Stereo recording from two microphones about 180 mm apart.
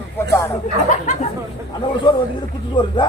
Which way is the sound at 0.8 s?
45° left (ahead or behind).